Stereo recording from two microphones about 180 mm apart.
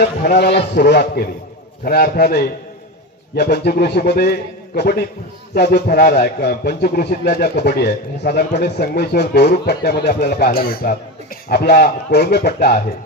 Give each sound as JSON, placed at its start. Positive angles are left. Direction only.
{"t": 0.0, "sound": "speech", "side_deg": 60}